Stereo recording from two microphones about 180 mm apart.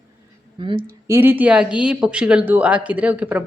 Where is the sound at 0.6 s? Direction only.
25° right (ahead or behind).